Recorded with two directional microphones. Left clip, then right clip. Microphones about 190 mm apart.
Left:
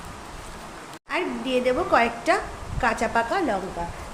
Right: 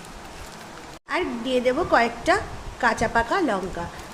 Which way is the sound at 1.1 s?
10° right (ahead or behind).